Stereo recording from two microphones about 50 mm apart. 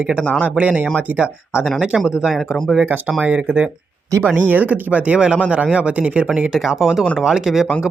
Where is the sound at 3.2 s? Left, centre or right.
Right.